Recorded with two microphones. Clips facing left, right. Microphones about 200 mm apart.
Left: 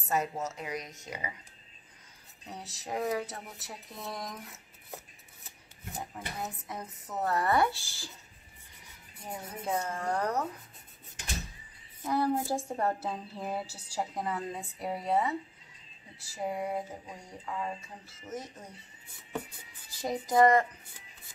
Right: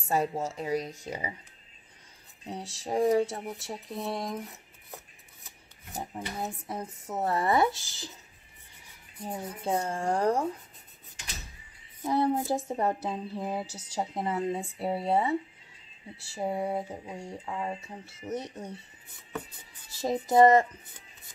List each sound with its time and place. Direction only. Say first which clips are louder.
0.1 s speech: right 3 dB; 30° right (ahead or behind)
2.4 s speech: right 5 dB; 30° right (ahead or behind)
5.9 s speech: right 4 dB; 30° right (ahead or behind)
9.2 s speech: right 4 dB; 30° right (ahead or behind)
12.0 s speech: right 3 dB; 25° right (ahead or behind)
20.0 s speech: right 4 dB; 25° right (ahead or behind)